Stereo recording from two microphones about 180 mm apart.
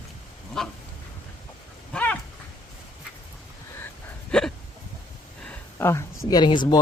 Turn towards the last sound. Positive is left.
turn(degrees=25)  # may be behind; listen again after turning